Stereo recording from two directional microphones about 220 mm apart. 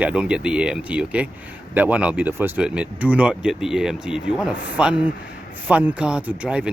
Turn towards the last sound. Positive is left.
turn(degrees=-5)  # may be behind; listen again after turning